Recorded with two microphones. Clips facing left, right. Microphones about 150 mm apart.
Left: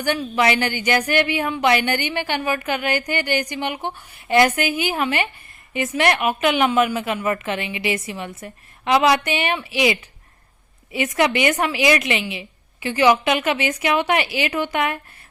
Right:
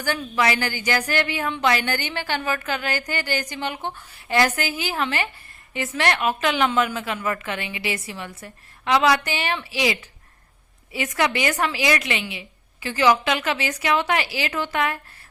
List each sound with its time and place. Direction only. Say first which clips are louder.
0.0 s a woman's voice: left 3 dB; 20° left (ahead or behind)